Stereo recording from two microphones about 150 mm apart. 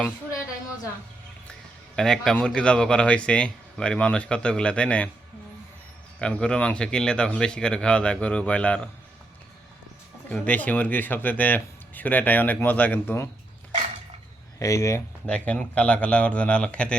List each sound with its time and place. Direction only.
2.0 s speech: 5° left (ahead or behind)
6.1 s speech: 5° left (ahead or behind)
10.2 s speech: 10° left (ahead or behind)
14.6 s speech: 20° left (ahead or behind)
15.3 s speech: 10° left (ahead or behind)